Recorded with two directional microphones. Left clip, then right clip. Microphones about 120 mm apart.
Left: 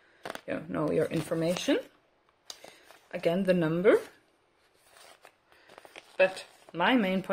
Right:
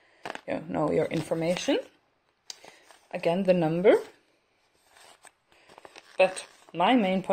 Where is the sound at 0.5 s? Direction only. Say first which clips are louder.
Right 3 dB; 5° right (ahead or behind).